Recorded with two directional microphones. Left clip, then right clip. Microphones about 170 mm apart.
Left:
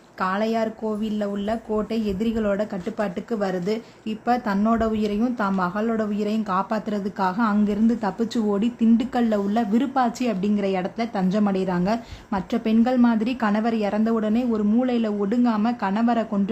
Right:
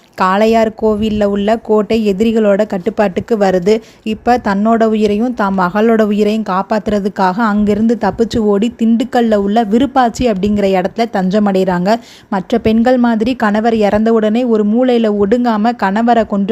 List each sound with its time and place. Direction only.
0.2 s a woman's voice: 50° right (ahead or behind)